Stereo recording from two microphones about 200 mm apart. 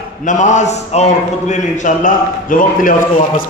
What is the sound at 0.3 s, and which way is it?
A man's voice, 40° left (ahead or behind).